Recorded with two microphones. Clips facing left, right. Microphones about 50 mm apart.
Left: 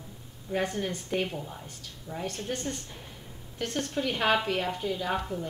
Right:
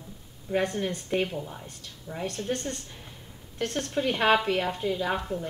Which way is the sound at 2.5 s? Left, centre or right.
Right.